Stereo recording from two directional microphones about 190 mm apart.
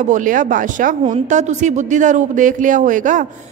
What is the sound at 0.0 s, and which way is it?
A woman's voice, 40° right (ahead or behind).